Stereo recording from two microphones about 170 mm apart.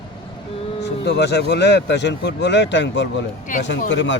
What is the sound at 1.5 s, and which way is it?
A man's voice, 90° left.